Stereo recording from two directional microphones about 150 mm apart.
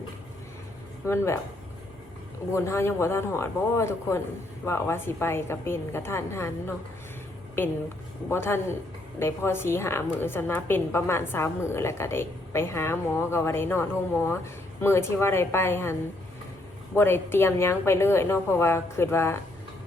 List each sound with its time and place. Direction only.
1.0 s a woman's voice: 15° left (ahead or behind)
2.5 s a woman's voice: 20° left (ahead or behind)